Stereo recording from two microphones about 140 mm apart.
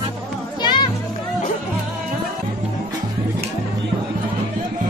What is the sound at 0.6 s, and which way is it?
Music, 30° left (ahead or behind).